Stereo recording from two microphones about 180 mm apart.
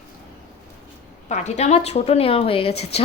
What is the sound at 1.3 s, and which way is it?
Speech, 40° left (ahead or behind).